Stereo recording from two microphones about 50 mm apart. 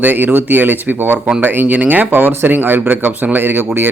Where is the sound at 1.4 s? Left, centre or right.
Right.